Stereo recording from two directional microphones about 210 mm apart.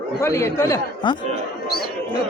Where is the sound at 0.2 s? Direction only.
15° left (ahead or behind).